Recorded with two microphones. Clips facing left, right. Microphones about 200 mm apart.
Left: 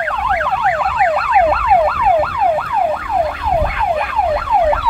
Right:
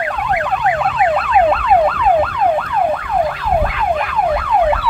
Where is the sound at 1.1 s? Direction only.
5° left (ahead or behind).